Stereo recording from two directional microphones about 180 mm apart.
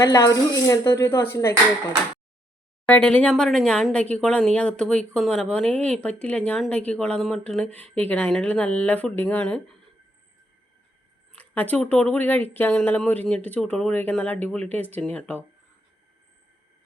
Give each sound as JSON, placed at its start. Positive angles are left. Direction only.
{"t": 0.0, "sound": "speech", "side_deg": 20}
{"t": 2.8, "sound": "speech", "side_deg": 5}
{"t": 11.3, "sound": "speech", "side_deg": 10}